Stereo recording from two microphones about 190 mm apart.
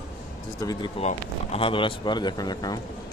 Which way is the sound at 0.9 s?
35° left (ahead or behind).